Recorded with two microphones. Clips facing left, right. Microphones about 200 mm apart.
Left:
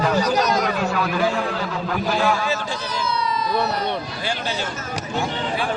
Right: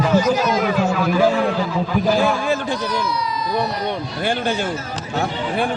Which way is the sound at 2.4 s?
55° right (ahead or behind).